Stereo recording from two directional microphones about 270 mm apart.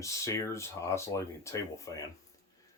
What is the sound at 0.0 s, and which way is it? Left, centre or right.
Speech, centre.